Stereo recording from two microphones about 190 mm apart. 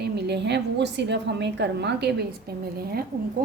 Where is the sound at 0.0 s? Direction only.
60° right (ahead or behind).